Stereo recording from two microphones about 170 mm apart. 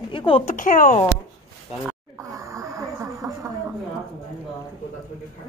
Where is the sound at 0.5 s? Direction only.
50° left (ahead or behind).